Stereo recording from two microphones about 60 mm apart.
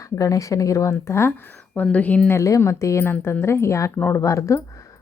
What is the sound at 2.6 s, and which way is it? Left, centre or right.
Speech, left.